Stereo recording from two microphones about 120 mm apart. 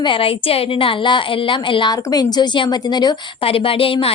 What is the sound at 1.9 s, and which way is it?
A woman's voice, 30° left (ahead or behind).